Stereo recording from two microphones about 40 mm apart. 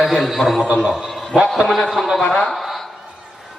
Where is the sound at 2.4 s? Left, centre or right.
Centre.